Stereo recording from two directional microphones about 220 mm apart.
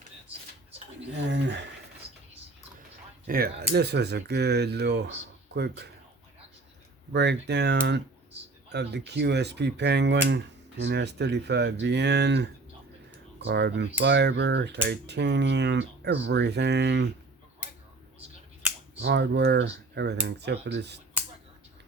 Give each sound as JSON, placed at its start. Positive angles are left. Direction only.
{"t": 1.3, "sound": "a sound", "side_deg": -50}
{"t": 3.2, "sound": "speech", "side_deg": -40}
{"t": 7.1, "sound": "speech", "side_deg": -50}
{"t": 19.0, "sound": "speech", "side_deg": -50}